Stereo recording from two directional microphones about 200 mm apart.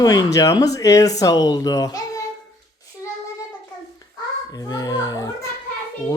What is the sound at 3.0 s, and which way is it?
Child singing, 15° left (ahead or behind).